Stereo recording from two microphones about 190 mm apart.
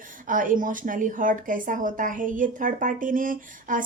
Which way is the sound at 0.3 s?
45° right (ahead or behind).